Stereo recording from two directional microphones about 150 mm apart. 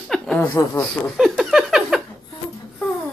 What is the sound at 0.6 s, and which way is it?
Speech, 20° left (ahead or behind).